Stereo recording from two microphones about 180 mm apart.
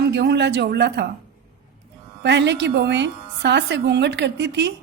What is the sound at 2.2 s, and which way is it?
A woman's voice, 75° right (ahead or behind).